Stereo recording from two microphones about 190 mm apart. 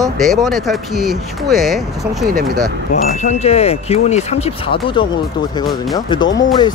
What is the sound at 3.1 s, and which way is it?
Speech, 35° left (ahead or behind).